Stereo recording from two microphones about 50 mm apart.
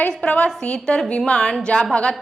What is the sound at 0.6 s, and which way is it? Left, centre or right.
A woman's voice, centre.